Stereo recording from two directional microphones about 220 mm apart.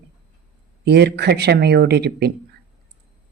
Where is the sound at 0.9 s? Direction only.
50° right (ahead or behind).